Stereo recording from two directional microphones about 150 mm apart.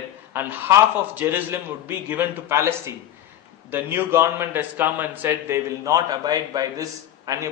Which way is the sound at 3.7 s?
15° right (ahead or behind).